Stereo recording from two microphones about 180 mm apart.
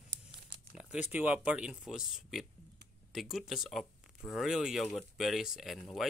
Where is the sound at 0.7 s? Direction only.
5° right (ahead or behind).